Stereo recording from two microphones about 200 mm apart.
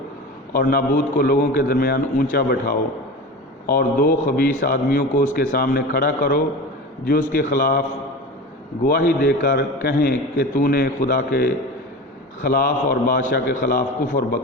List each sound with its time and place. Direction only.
0.5 s a man's voice: 45° left (ahead or behind)
8.8 s a man's voice: 50° left (ahead or behind)